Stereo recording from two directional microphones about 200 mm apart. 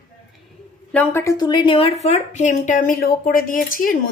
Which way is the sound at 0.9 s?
10° left (ahead or behind).